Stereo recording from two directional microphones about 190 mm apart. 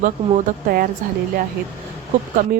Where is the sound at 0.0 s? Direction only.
45° right (ahead or behind).